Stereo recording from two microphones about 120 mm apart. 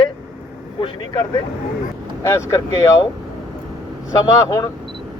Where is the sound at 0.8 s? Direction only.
40° left (ahead or behind).